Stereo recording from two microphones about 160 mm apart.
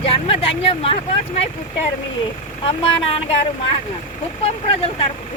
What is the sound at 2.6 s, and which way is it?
Speech, 35° left (ahead or behind).